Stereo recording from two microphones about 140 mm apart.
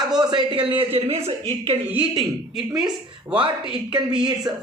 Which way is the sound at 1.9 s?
5° right (ahead or behind).